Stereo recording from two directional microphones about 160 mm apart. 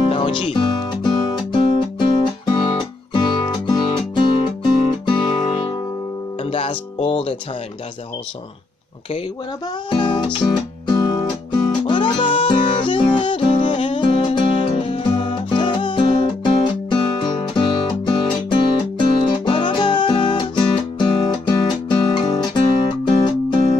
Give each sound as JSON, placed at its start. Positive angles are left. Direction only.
{"t": 0.1, "sound": "music", "side_deg": 35}
{"t": 9.8, "sound": "music", "side_deg": 30}